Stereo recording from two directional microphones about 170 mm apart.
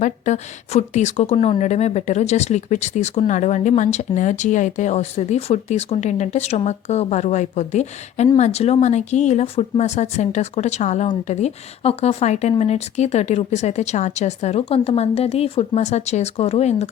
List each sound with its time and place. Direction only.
0.0 s a woman's voice: 45° left (ahead or behind)